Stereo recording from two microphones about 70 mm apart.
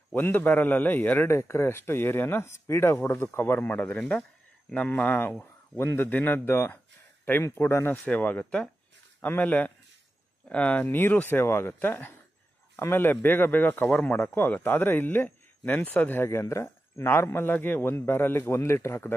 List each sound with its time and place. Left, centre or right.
0.1 s speech: left
1.2 s speech: left
4.0 s speech: centre
16.2 s speech: left